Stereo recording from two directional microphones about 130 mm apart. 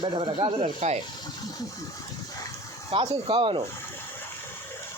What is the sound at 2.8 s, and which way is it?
Speech, 45° right (ahead or behind).